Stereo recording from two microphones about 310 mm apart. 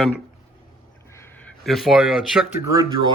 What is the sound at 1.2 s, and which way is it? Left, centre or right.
Speech, centre.